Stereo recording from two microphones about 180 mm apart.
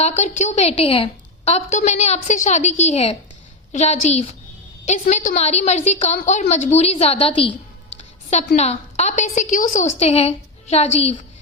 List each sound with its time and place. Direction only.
0.0 s a woman's voice: 40° left (ahead or behind)
7.9 s a sound: 40° left (ahead or behind)
8.5 s a woman's voice: 35° left (ahead or behind)